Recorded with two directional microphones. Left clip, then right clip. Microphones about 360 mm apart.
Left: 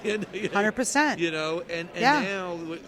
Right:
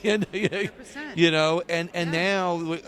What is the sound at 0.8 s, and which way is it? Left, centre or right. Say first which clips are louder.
Speech: left 14 dB; left.